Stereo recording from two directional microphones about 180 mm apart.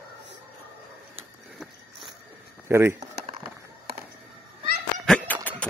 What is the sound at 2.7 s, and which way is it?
Speech, 15° right (ahead or behind).